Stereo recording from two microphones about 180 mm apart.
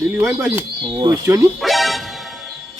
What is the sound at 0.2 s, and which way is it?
Speech, 10° right (ahead or behind).